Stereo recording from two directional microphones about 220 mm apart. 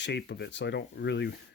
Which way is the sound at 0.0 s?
50° left (ahead or behind).